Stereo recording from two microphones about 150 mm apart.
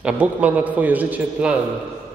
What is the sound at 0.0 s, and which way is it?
A man's voice, 10° right (ahead or behind).